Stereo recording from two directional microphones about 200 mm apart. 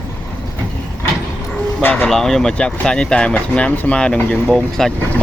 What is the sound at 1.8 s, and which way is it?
Speech, 5° left (ahead or behind).